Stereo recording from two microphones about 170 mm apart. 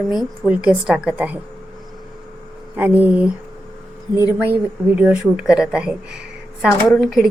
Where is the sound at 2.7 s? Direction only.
10° right (ahead or behind).